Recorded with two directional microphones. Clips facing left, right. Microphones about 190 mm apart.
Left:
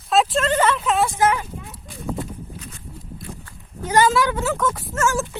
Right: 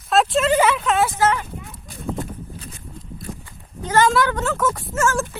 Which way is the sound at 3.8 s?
10° left (ahead or behind).